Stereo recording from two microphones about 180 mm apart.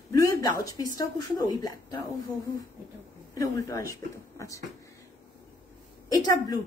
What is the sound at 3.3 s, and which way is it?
Speech, 20° left (ahead or behind).